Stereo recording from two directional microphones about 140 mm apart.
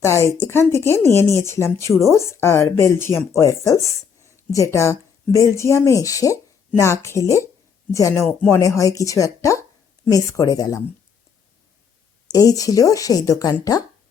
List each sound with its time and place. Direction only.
0.0 s speech: 20° left (ahead or behind)
12.3 s speech: 25° left (ahead or behind)